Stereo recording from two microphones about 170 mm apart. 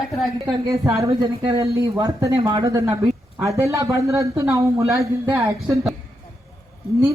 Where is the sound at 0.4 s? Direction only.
20° right (ahead or behind).